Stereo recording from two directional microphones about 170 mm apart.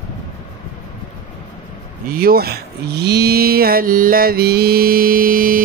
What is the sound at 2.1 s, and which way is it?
Speech, 60° right (ahead or behind).